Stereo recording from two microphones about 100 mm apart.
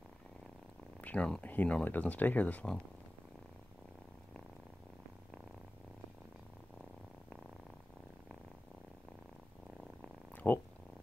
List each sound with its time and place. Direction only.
1.0 s speech: 10° left (ahead or behind)
9.8 s purr: 15° left (ahead or behind)